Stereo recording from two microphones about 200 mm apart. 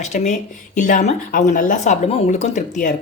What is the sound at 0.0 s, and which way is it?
A woman's voice, 35° left (ahead or behind).